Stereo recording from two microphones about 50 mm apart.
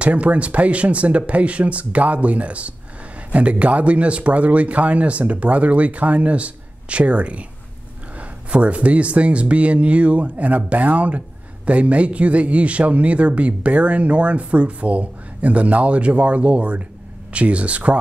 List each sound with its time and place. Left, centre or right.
0.0 s speech: right